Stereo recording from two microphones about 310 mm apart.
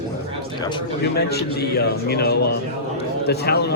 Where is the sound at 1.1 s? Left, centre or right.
Left.